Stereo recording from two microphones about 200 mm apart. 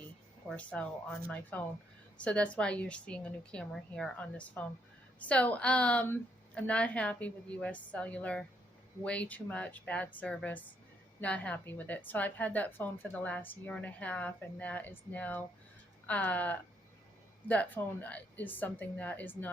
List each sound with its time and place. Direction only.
0.4 s a woman's voice: 5° left (ahead or behind)